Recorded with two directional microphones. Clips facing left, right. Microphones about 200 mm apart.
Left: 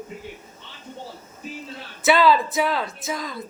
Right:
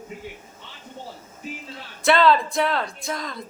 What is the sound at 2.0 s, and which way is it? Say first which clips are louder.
Speech: even; 5° left (ahead or behind).